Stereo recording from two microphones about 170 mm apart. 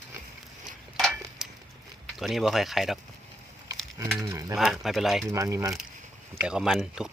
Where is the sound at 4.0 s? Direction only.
15° right (ahead or behind).